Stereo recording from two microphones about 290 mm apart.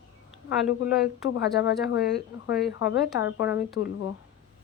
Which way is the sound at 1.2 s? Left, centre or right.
Left.